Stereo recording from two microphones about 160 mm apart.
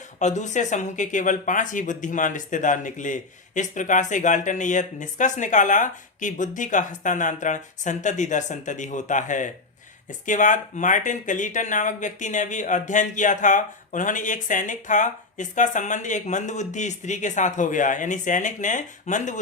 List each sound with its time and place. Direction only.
0.2 s speech: 50° left (ahead or behind)